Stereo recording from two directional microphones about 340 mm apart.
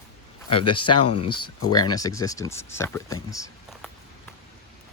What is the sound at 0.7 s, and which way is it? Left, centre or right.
Speech, centre.